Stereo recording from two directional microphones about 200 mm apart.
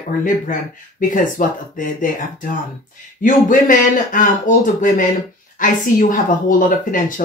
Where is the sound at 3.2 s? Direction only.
40° left (ahead or behind).